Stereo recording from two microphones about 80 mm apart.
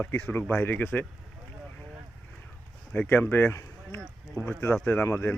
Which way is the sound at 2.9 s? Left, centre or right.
Left.